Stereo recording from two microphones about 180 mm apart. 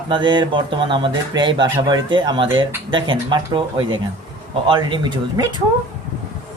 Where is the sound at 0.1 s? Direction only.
25° right (ahead or behind).